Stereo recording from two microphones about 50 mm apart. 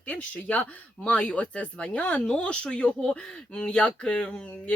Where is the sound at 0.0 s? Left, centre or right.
Left.